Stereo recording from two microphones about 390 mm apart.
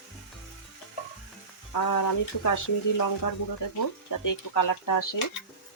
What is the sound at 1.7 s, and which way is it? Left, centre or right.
Speech, left.